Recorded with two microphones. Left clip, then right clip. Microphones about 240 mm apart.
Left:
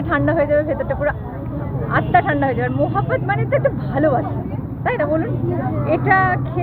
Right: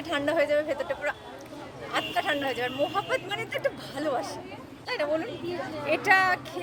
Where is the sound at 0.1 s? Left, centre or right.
Right.